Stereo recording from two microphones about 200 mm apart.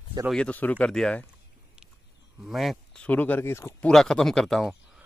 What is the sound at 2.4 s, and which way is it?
Speech, centre (ahead or behind).